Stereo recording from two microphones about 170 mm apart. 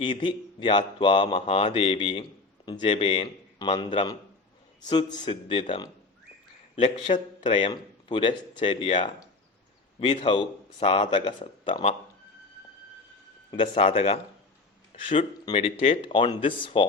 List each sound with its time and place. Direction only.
0.0 s a man's voice: 30° left (ahead or behind)
10.2 s speech: 30° left (ahead or behind)
13.5 s speech: 30° left (ahead or behind)